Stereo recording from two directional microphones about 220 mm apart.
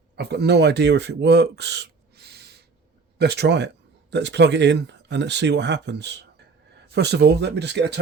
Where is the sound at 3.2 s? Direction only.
50° right (ahead or behind).